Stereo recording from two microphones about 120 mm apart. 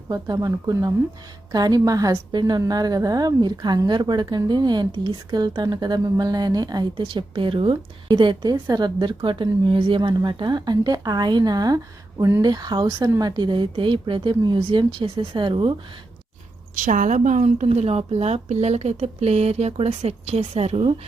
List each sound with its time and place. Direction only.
0.1 s a woman's voice: 35° right (ahead or behind)
13.0 s speech: 20° right (ahead or behind)
13.2 s speech: 35° right (ahead or behind)
16.7 s a woman's voice: 90° right; by 20.9 s 55° right (ahead or behind)